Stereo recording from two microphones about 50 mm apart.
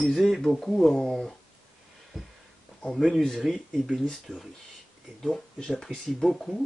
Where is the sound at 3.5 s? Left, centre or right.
Centre.